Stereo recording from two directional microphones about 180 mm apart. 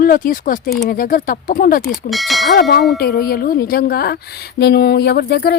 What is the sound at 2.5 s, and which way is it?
Speech, 60° left (ahead or behind).